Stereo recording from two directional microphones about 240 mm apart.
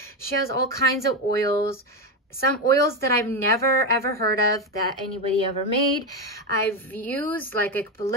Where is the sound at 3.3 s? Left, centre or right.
Centre.